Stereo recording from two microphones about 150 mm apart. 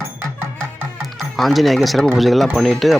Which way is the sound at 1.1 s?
Centre (ahead or behind).